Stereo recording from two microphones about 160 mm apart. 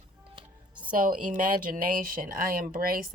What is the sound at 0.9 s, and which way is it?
Speech, 55° right (ahead or behind).